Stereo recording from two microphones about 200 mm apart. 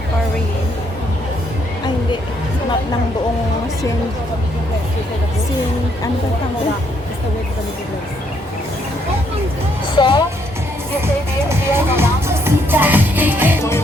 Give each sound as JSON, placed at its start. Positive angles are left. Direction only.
{"t": 9.9, "sound": "speech", "side_deg": 20}
{"t": 11.0, "sound": "music", "side_deg": -10}